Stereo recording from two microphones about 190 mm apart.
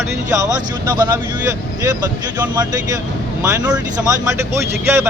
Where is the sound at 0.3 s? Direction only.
20° right (ahead or behind).